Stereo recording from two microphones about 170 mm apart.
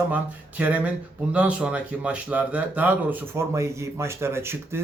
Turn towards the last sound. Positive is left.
turn(degrees=-15)  # may be behind; listen again after turning